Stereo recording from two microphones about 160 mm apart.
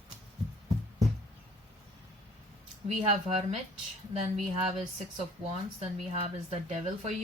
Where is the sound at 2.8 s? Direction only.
40° right (ahead or behind).